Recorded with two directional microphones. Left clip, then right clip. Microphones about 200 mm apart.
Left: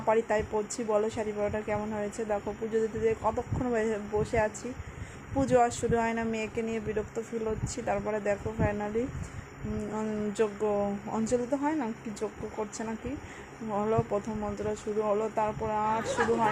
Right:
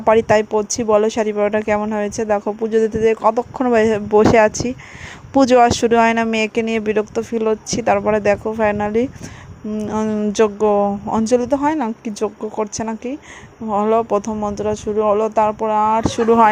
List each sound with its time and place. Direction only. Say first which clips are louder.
0.0 s speech: right 14 dB; 45° right (ahead or behind)